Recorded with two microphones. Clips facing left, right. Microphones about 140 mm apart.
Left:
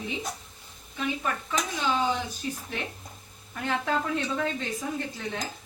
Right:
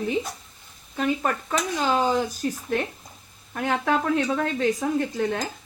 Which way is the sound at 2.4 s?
55° right (ahead or behind).